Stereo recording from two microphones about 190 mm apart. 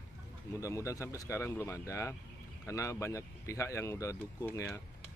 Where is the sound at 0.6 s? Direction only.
15° left (ahead or behind).